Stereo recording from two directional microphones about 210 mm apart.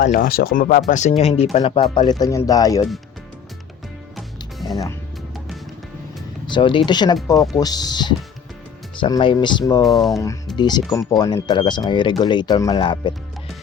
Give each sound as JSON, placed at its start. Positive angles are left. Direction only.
{"t": 0.0, "sound": "speech", "side_deg": 45}
{"t": 4.6, "sound": "music", "side_deg": 15}
{"t": 6.5, "sound": "speech", "side_deg": 25}